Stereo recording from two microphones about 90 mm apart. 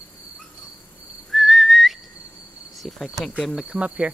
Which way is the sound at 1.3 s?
Centre (ahead or behind).